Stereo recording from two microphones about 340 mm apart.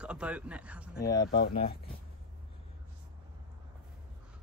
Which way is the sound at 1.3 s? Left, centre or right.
Left.